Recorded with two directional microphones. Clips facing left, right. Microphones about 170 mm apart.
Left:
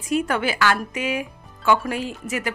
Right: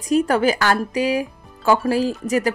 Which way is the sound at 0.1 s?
40° right (ahead or behind).